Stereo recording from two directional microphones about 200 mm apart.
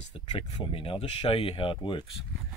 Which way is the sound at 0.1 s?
25° left (ahead or behind).